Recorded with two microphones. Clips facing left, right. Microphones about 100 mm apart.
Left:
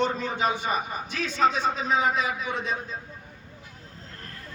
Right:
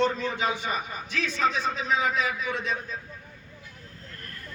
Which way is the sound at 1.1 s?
35° left (ahead or behind).